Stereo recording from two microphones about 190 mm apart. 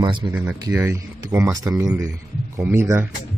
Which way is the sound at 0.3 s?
10° right (ahead or behind).